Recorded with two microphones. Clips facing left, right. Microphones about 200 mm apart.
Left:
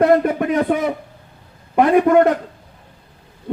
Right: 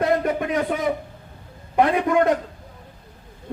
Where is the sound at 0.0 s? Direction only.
55° left (ahead or behind).